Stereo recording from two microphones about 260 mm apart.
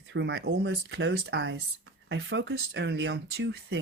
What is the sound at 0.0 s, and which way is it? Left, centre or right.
Speech, right.